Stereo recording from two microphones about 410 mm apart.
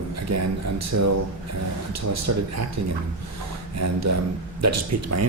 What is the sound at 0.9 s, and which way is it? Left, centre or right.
Speech, right.